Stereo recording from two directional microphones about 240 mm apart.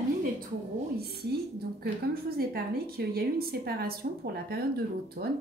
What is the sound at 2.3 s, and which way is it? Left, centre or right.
Speech, right.